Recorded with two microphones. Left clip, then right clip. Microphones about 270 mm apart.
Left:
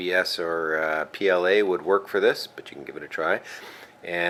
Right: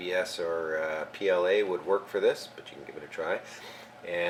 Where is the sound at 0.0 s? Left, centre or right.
Centre.